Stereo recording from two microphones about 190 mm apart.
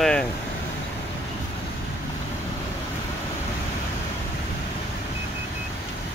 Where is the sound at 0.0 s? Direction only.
5° left (ahead or behind).